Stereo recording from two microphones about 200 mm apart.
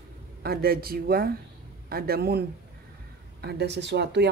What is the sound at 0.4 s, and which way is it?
Speech, 50° right (ahead or behind).